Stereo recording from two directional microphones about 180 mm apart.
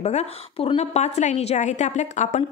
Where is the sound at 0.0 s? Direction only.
35° left (ahead or behind).